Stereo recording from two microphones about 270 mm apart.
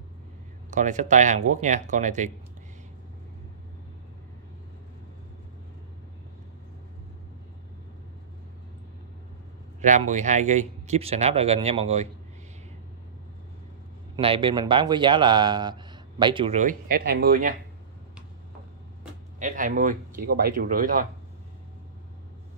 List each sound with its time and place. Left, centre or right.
0.7 s speech: right
9.8 s speech: right
14.1 s a man's voice: centre
19.4 s speech: right